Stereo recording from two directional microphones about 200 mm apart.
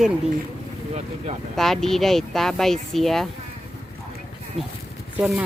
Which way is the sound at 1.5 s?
Centre (ahead or behind).